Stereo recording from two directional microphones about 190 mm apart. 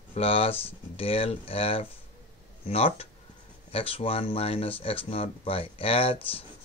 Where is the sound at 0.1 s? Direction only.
30° left (ahead or behind).